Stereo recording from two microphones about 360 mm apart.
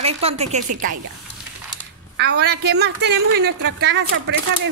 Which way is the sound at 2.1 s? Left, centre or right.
Right.